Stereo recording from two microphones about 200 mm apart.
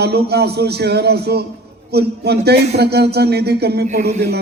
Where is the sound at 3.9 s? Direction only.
35° right (ahead or behind).